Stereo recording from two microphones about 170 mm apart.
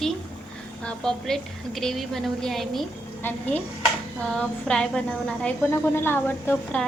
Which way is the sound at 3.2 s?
10° left (ahead or behind).